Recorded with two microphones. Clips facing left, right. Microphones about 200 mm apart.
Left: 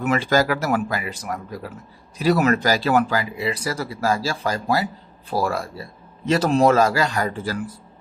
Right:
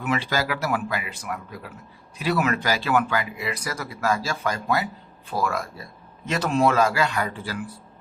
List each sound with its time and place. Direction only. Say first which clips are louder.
0.0 s speech: left 6 dB; 45° left (ahead or behind)